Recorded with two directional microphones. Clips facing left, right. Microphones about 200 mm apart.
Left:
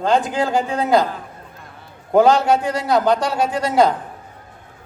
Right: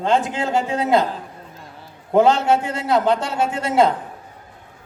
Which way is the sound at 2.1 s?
25° right (ahead or behind).